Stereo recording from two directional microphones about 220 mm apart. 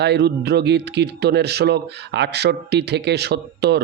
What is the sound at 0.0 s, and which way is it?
A man's voice, 50° right (ahead or behind).